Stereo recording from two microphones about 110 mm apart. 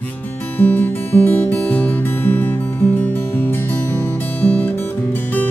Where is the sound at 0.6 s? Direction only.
15° left (ahead or behind).